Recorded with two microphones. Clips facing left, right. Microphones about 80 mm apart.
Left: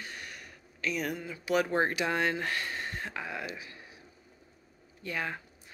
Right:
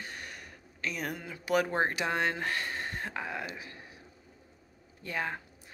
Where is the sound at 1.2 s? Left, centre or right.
Right.